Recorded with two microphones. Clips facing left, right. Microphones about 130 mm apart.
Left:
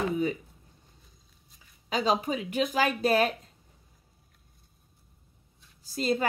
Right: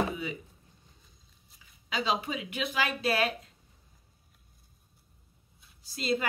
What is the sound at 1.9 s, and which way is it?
Speech, 45° left (ahead or behind).